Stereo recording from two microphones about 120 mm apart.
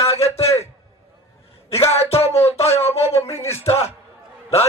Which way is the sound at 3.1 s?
20° left (ahead or behind).